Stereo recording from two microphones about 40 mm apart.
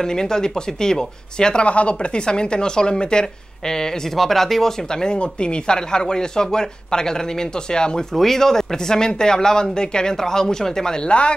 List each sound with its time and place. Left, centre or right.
0.0 s speech: centre
1.7 s speech: left
8.2 s speech: centre
11.1 s speech: left